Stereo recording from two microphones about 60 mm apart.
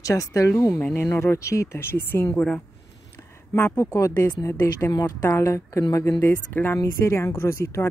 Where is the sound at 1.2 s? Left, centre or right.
Left.